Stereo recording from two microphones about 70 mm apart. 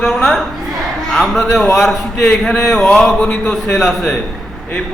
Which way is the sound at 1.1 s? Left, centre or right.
Centre.